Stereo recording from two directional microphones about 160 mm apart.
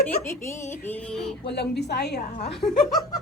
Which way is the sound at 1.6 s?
90° left.